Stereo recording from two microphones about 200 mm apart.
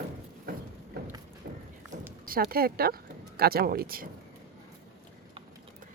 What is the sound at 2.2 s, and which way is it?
Speech, 45° right (ahead or behind).